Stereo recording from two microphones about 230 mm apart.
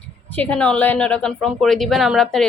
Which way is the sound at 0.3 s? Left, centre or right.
Centre.